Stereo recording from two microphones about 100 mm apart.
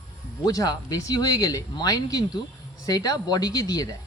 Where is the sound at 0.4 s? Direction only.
40° left (ahead or behind).